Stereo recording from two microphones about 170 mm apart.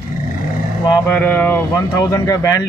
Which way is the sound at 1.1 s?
10° left (ahead or behind).